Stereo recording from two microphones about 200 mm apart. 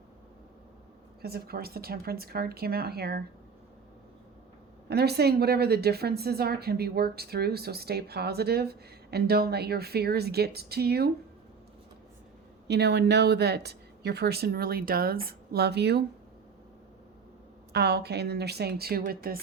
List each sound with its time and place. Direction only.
1.2 s a woman's voice: 50° right (ahead or behind)
4.9 s a woman's voice: 55° right (ahead or behind)
12.6 s speech: 55° right (ahead or behind)
17.7 s speech: 55° right (ahead or behind)